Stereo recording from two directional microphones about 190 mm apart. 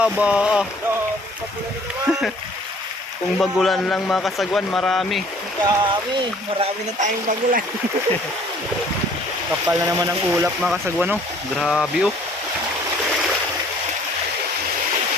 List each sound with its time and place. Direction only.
0.0 s a man's voice: 5° right (ahead or behind)
2.1 s stream: centre (ahead or behind)
3.4 s a man's voice: centre (ahead or behind)
5.6 s speech: 25° right (ahead or behind)
7.0 s speech: 45° right (ahead or behind)
9.6 s a man's voice: 20° right (ahead or behind); by 12.1 s centre (ahead or behind)